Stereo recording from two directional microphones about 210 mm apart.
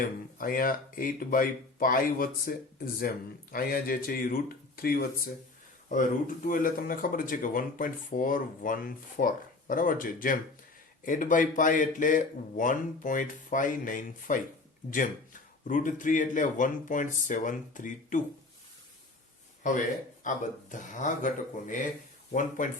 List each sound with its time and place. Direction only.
0.3 s speech: 40° left (ahead or behind)
19.6 s speech: 40° left (ahead or behind)